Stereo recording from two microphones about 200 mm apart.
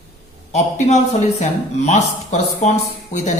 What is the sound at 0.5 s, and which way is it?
A man's voice, 35° left (ahead or behind).